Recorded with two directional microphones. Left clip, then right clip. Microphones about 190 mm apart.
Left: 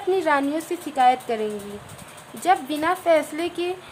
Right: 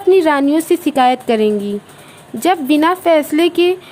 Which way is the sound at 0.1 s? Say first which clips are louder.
Right 10 dB; 45° right (ahead or behind).